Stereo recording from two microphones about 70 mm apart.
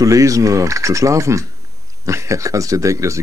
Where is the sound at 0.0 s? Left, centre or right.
Right.